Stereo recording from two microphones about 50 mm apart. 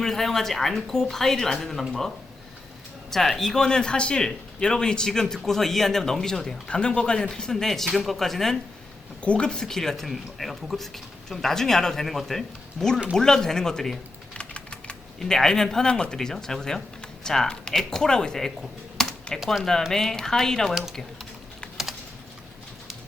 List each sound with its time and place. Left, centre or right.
0.0 s speech: centre
6.7 s speech: centre
7.5 s speech: centre
9.2 s speech: left
14.3 s typing: left
15.2 s speech: centre
18.9 s typing: centre
19.9 s speech: centre